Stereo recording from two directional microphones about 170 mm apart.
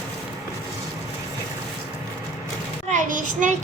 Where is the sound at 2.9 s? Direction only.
50° right (ahead or behind).